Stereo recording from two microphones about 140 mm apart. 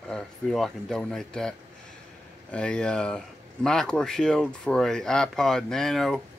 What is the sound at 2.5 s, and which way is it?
Speech, 10° left (ahead or behind).